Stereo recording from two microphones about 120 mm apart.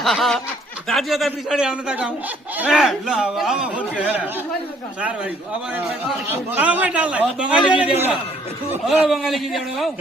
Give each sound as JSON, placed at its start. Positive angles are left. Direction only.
{"t": 0.0, "sound": "a man's voice", "side_deg": 0}
{"t": 6.5, "sound": "a man's voice", "side_deg": -15}
{"t": 9.0, "sound": "a man's voice", "side_deg": 0}